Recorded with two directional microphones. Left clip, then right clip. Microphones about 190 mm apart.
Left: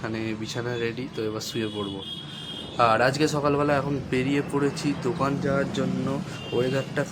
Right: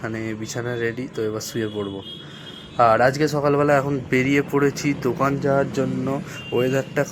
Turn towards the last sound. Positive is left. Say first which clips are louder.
# right 5 dB
turn(degrees=-20)  # may be behind; listen again after turning